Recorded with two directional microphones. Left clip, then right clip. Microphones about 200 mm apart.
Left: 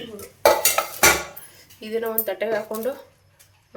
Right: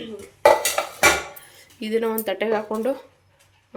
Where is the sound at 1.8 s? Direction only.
50° right (ahead or behind); by 2.9 s 35° right (ahead or behind).